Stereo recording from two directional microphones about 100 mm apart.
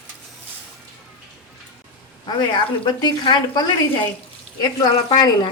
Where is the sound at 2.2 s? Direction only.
50° left (ahead or behind).